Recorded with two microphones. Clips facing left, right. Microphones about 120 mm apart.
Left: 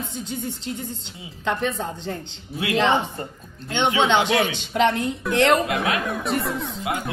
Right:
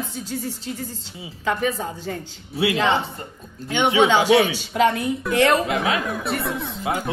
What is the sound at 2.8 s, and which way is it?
Speech, 15° left (ahead or behind).